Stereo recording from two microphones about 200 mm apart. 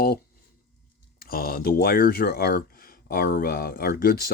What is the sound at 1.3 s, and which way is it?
Speech, 50° left (ahead or behind).